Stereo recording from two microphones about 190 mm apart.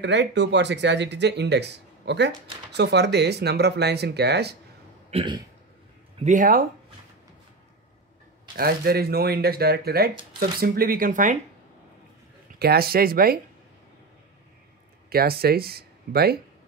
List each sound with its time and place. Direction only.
0.0 s speech: 70° right (ahead or behind)
5.1 s speech: 25° right (ahead or behind)
6.1 s speech: 40° right (ahead or behind)
8.5 s speech: 55° right (ahead or behind)
12.5 s speech: 55° right (ahead or behind)
15.0 s speech: 55° right (ahead or behind)